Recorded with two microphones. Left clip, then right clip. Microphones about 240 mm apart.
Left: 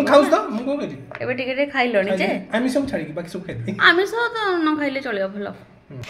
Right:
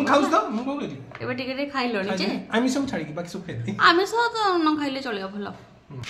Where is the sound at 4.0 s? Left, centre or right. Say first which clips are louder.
Left 1 dB; right.